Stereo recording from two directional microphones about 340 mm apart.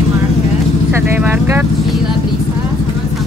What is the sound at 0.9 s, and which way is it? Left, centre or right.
Speech, centre.